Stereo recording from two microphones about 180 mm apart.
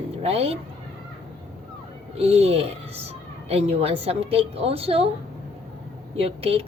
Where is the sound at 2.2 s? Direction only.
35° right (ahead or behind).